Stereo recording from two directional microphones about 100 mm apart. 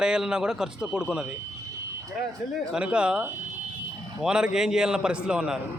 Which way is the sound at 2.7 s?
10° right (ahead or behind).